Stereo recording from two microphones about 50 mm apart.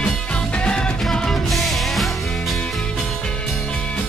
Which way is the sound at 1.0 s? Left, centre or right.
Centre.